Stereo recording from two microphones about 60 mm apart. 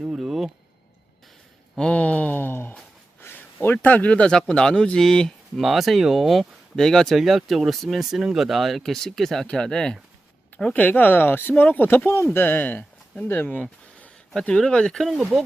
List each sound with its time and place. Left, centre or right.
0.2 s a sound: centre
1.8 s a sound: left
4.4 s speech: centre
5.5 s speech: centre
6.7 s speech: centre
10.8 s speech: left
14.5 s speech: centre
15.0 s speech: centre